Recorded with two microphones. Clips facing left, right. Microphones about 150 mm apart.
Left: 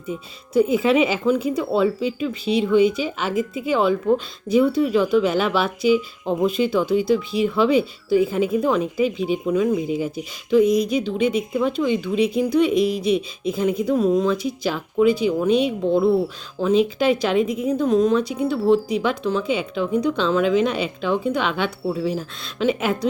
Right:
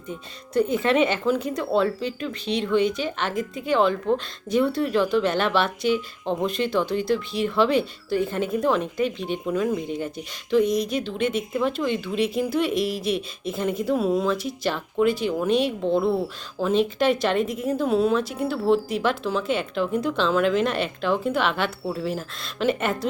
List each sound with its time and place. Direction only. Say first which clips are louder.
0.1 s speech: left 4 dB; 5° left (ahead or behind)